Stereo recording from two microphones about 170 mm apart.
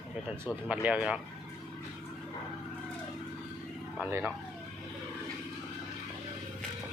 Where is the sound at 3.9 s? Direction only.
5° right (ahead or behind).